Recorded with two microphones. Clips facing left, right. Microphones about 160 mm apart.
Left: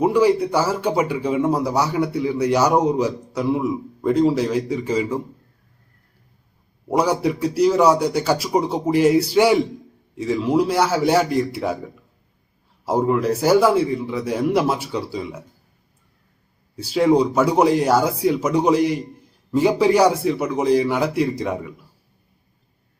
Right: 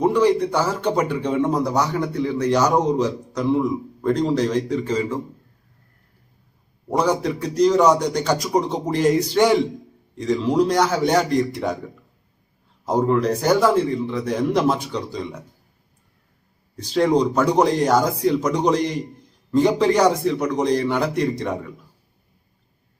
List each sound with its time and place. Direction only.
0.0 s speech: 10° left (ahead or behind)
6.8 s speech: 10° left (ahead or behind)
12.8 s speech: 5° left (ahead or behind)
16.7 s speech: 5° left (ahead or behind)